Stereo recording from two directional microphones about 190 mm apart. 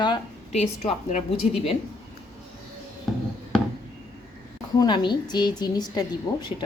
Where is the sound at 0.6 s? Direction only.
35° left (ahead or behind).